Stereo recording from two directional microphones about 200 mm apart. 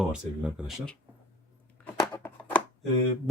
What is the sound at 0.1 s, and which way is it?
Speech, 5° right (ahead or behind).